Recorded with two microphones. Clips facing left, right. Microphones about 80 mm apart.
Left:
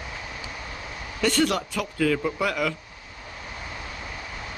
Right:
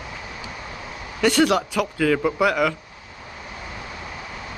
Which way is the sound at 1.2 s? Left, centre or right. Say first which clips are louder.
Right 5 dB; right.